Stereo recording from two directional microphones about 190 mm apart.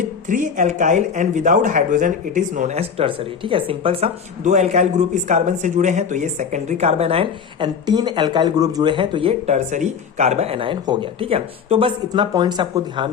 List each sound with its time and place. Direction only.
0.3 s speech: 40° right (ahead or behind); by 13.1 s 20° right (ahead or behind)